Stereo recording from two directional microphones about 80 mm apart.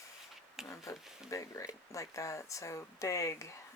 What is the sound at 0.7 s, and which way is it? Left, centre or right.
Speech, left.